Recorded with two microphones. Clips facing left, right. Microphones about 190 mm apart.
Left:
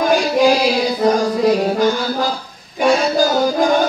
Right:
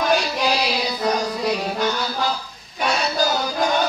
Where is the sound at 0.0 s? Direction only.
50° left (ahead or behind).